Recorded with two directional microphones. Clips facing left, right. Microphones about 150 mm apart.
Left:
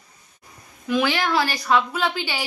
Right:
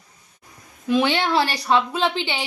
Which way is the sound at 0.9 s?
30° right (ahead or behind).